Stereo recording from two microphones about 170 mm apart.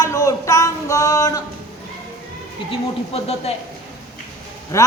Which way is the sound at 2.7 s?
35° left (ahead or behind).